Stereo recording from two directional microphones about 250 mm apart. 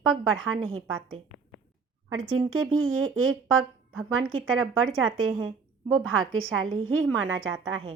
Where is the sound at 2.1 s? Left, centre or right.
Right.